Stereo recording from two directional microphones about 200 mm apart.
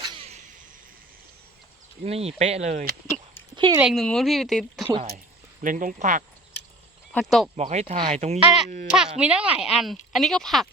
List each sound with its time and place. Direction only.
2.0 s speech: 30° right (ahead or behind)
3.5 s a sound: 25° right (ahead or behind)
3.8 s speech: centre (ahead or behind)
5.6 s speech: 40° right (ahead or behind)
7.1 s speech: 5° left (ahead or behind)
7.5 s speech: 35° right (ahead or behind)
8.4 s speech: 5° right (ahead or behind)